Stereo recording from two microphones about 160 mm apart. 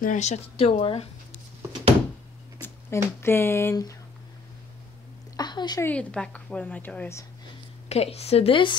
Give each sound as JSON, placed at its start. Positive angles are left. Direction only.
{"t": 0.0, "sound": "speech", "side_deg": 50}
{"t": 2.6, "sound": "speech", "side_deg": 15}
{"t": 5.3, "sound": "a sound", "side_deg": 25}
{"t": 5.9, "sound": "a woman's voice", "side_deg": 5}
{"t": 7.9, "sound": "speech", "side_deg": 40}